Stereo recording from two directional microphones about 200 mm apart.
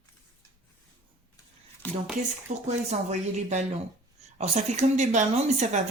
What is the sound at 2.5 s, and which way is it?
A woman's voice, 35° right (ahead or behind).